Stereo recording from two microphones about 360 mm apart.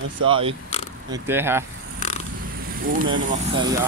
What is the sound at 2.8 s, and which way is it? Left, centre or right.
Speech, right.